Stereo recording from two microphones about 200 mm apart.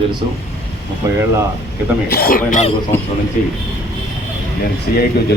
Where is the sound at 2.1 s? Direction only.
45° left (ahead or behind).